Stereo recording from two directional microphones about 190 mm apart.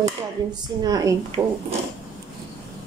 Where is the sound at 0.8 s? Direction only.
20° right (ahead or behind).